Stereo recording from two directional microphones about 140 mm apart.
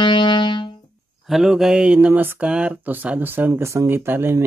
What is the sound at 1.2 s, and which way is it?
Speech, centre (ahead or behind).